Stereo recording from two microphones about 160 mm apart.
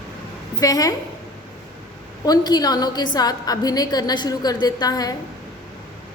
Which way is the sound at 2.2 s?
25° left (ahead or behind).